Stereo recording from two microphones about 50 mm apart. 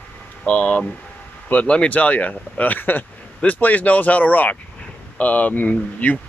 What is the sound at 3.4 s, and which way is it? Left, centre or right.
Speech, left.